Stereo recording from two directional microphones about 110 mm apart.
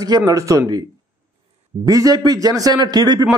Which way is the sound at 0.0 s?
35° right (ahead or behind).